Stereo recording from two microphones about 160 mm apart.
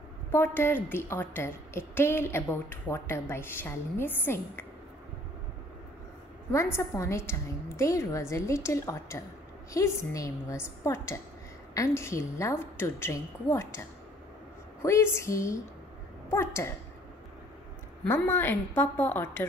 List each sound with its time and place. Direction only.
0.3 s a woman's voice: 15° left (ahead or behind)
6.5 s a woman's voice: 15° left (ahead or behind)
18.0 s a woman's voice: 15° left (ahead or behind)